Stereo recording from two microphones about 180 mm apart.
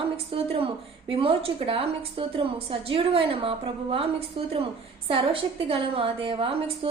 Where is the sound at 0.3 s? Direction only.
30° right (ahead or behind).